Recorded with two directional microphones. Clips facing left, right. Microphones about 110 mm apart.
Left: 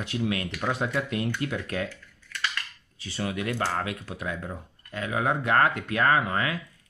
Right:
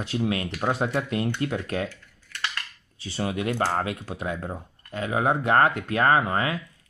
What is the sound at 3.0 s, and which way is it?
Speech, 30° right (ahead or behind).